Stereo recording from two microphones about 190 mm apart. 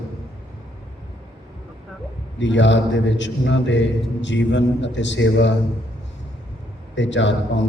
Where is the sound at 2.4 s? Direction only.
70° left (ahead or behind).